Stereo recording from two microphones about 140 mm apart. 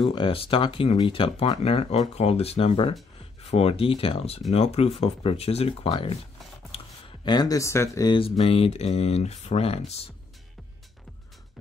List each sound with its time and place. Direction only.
0.0 s speech: 35° left (ahead or behind)
7.2 s speech: 30° left (ahead or behind)
8.1 s speech: 40° left (ahead or behind)